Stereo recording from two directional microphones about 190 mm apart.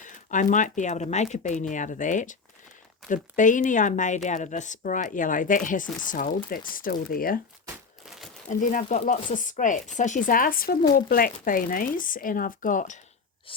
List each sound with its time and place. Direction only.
0.0 s speech: 40° left (ahead or behind)
8.4 s speech: 40° left (ahead or behind)
13.5 s gasp: 25° left (ahead or behind)